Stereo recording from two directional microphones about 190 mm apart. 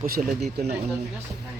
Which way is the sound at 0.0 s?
45° right (ahead or behind).